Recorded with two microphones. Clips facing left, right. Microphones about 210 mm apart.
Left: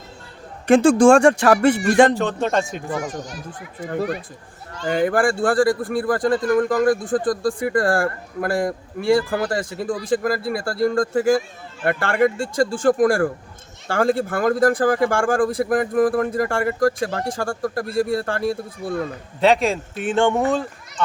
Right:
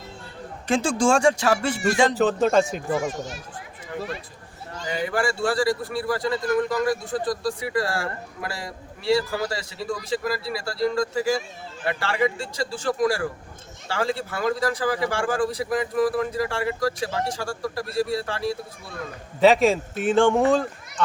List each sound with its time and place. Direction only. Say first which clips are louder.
0.7 s speech: left 9 dB; 55° left (ahead or behind)
2.1 s speech: right 2 dB; 5° right (ahead or behind)
2.9 s a child's voice: right 1 dB; 25° right (ahead or behind)
3.8 s speech: left 8 dB; 55° left (ahead or behind)
19.4 s speech: right 1 dB; centre (ahead or behind)